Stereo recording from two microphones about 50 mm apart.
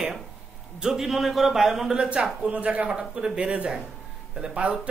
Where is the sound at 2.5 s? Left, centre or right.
Right.